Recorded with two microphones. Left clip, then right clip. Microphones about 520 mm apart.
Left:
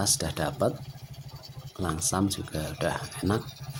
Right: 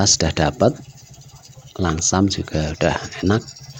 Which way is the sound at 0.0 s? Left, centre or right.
Left.